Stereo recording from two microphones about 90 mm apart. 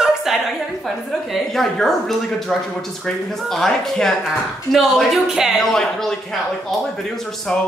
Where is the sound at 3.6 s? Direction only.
5° left (ahead or behind).